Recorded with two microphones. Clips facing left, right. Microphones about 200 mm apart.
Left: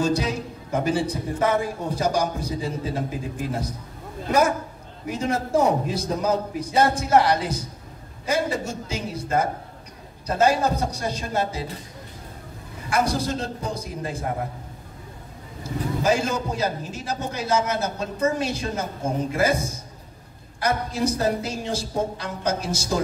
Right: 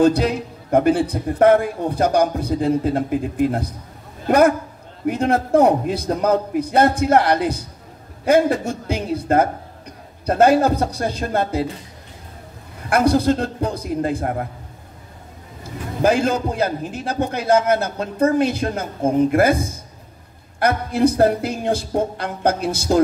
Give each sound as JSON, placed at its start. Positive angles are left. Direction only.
{"t": 0.0, "sound": "a man's voice", "side_deg": -55}
{"t": 12.9, "sound": "a man's voice", "side_deg": -60}
{"t": 16.0, "sound": "a man's voice", "side_deg": -55}